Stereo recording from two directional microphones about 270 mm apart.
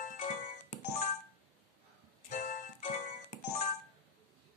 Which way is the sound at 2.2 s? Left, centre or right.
Left.